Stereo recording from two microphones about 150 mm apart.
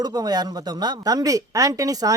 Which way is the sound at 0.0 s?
25° right (ahead or behind).